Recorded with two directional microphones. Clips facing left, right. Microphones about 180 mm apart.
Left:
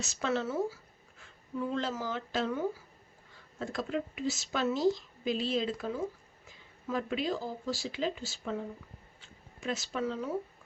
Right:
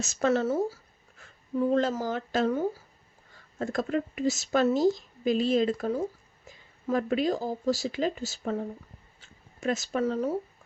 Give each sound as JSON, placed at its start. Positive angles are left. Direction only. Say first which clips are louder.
{"t": 0.0, "sound": "speech", "louder": "right 7 dB", "side_deg": -45}